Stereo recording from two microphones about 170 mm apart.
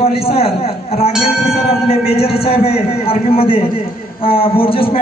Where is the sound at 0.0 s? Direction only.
35° left (ahead or behind).